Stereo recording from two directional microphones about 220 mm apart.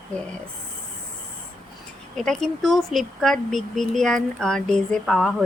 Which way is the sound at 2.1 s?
Centre (ahead or behind).